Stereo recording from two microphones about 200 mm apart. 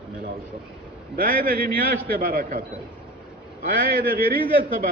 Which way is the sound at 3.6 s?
45° right (ahead or behind).